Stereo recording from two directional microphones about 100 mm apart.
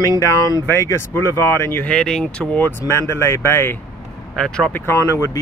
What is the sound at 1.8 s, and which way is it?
Speech, 10° left (ahead or behind).